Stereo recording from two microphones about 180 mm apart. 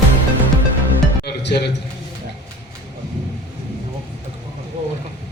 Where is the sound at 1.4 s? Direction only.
70° left (ahead or behind).